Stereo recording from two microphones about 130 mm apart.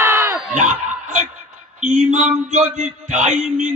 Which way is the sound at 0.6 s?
75° right (ahead or behind).